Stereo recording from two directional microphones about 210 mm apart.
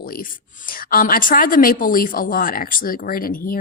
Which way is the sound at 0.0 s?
40° left (ahead or behind).